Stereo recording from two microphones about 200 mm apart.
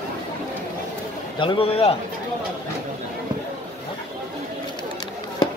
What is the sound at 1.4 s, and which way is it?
Speech, 25° left (ahead or behind).